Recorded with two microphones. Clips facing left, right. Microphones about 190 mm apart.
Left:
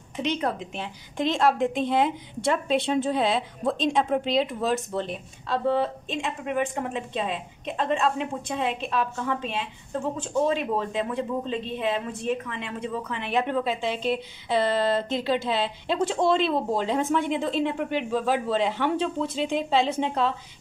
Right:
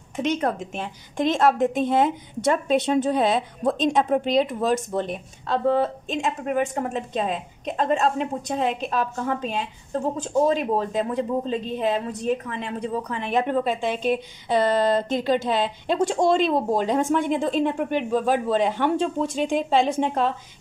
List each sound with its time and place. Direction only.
0.1 s a woman's voice: 45° right (ahead or behind)